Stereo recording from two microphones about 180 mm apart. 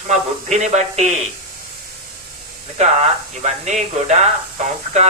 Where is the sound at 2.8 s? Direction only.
40° right (ahead or behind).